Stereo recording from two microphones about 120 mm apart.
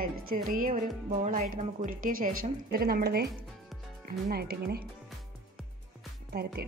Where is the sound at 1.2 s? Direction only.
90° right.